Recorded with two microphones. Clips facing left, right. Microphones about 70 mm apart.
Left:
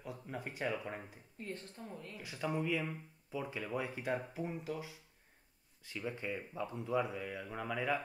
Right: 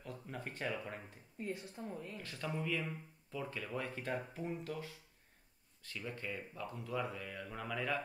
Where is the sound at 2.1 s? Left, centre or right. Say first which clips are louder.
Left 7 dB; centre.